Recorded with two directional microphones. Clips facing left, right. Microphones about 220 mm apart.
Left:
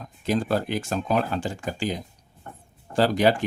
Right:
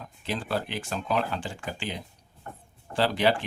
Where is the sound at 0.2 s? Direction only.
45° left (ahead or behind).